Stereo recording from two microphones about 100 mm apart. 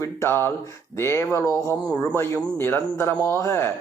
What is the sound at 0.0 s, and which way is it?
A man's voice, 25° left (ahead or behind).